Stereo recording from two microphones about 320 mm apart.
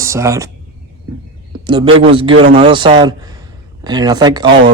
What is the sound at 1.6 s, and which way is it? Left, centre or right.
A man's voice, centre.